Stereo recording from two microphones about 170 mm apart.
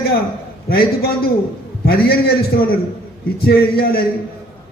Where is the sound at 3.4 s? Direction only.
65° left (ahead or behind).